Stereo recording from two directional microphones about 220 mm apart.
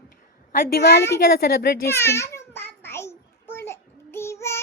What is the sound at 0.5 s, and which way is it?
Speech, 45° left (ahead or behind).